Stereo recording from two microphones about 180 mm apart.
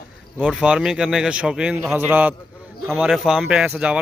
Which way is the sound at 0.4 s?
5° right (ahead or behind).